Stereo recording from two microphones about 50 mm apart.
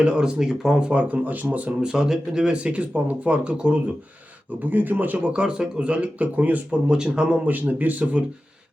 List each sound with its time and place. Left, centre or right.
0.0 s speech: right
0.3 s speech: centre
0.8 s speech: right
1.8 s speech: centre
4.6 s speech: right
5.3 s speech: right
6.8 s speech: centre
7.7 s speech: right